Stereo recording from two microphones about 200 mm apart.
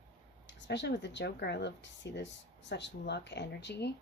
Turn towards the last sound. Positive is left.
turn(degrees=55)  # may be behind; listen again after turning